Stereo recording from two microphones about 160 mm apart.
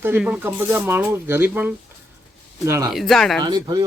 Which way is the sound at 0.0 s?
10° right (ahead or behind).